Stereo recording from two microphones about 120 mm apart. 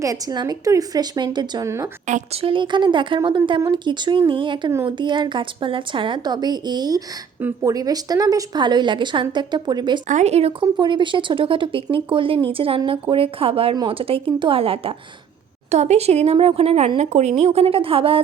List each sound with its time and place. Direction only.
0.0 s a woman's voice: 30° right (ahead or behind)
1.6 s a woman's voice: 25° right (ahead or behind)
2.0 s a woman's voice: 90° right
2.4 s a woman's voice: 45° right (ahead or behind)
10.1 s speech: 80° right
10.6 s speech: 40° right (ahead or behind)
15.7 s a woman's voice: 65° right (ahead or behind); by 18.2 s 50° right (ahead or behind)